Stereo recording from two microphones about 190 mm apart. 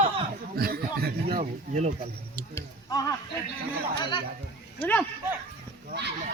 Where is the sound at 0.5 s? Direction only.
55° right (ahead or behind).